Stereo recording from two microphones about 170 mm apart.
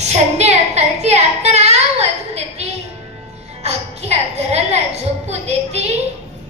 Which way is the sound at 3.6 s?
40° right (ahead or behind).